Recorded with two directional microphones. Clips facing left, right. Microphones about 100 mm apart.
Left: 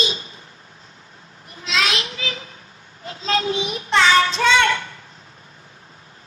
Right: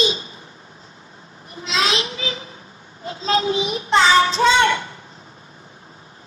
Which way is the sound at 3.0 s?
25° right (ahead or behind).